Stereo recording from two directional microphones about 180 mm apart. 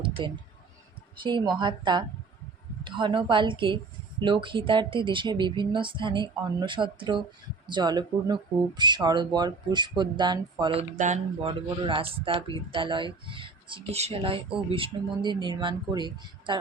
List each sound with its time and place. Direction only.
0.0 s speech: 30° right (ahead or behind)
10.9 s speech: 40° right (ahead or behind)
11.4 s speech: 30° right (ahead or behind)